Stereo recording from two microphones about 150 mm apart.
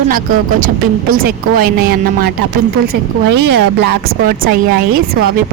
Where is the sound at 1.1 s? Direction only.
80° right.